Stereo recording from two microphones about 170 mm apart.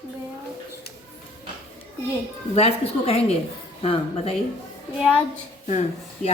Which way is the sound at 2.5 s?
35° left (ahead or behind).